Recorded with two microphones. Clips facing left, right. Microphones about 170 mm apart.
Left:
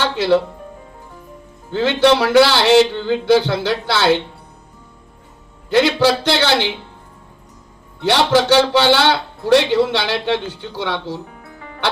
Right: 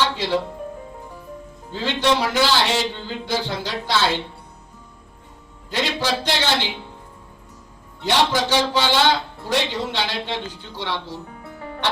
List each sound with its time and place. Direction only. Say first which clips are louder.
0.0 s speech: left 6 dB; 65° left (ahead or behind)
1.7 s a man's voice: left 7 dB; 70° left (ahead or behind)
5.7 s a man's voice: left 9 dB; 70° left (ahead or behind)
8.0 s a man's voice: left 6 dB; 70° left (ahead or behind)